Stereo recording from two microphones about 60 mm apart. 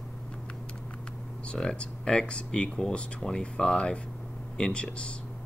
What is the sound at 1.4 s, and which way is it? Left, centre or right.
Speech, centre.